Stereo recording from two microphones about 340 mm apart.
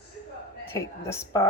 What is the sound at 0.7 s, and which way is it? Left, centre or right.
Speech, centre.